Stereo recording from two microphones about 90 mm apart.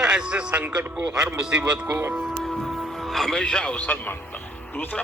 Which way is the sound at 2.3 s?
Centre (ahead or behind).